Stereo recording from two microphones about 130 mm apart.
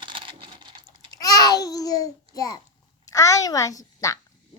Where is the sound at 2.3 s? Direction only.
30° left (ahead or behind).